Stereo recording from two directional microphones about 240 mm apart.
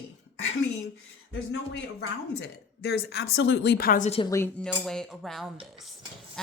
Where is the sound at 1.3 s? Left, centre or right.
Left.